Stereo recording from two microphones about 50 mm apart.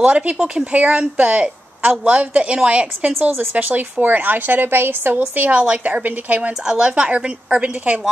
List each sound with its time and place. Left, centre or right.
0.0 s a woman's voice: right
3.2 s a woman's voice: right
5.3 s a woman's voice: right
6.6 s a woman's voice: centre